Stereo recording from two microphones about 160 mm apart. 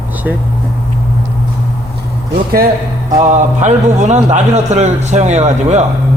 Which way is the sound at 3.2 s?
50° right (ahead or behind).